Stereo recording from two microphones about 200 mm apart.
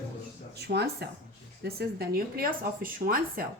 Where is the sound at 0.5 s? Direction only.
55° right (ahead or behind).